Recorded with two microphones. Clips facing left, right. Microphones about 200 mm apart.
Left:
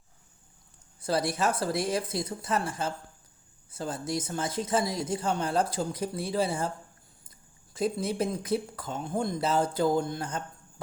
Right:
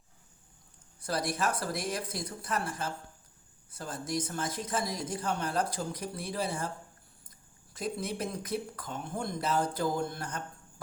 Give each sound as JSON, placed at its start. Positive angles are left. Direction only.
{"t": 0.9, "sound": "speech", "side_deg": 25}
{"t": 7.7, "sound": "speech", "side_deg": 30}